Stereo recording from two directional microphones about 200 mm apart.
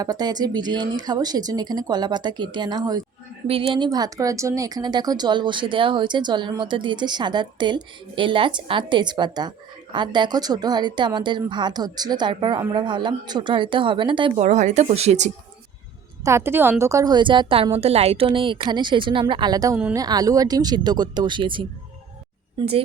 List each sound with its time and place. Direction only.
0.0 s speech: 20° right (ahead or behind)
16.2 s speech: 10° right (ahead or behind); by 22.8 s 30° right (ahead or behind)